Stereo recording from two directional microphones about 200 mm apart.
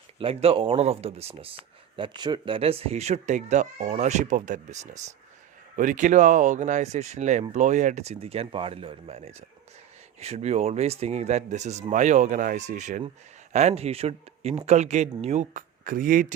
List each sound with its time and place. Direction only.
0.2 s speech: 30° right (ahead or behind); by 16.2 s 45° right (ahead or behind)